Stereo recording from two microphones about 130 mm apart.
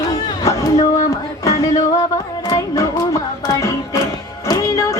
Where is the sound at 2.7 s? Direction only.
25° left (ahead or behind).